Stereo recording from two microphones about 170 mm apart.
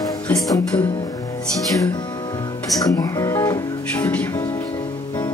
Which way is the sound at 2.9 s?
20° left (ahead or behind).